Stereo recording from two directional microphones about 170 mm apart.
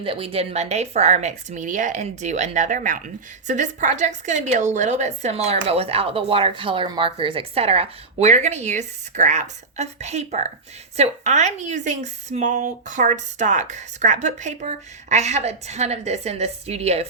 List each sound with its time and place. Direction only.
0.0 s a woman's voice: 35° right (ahead or behind)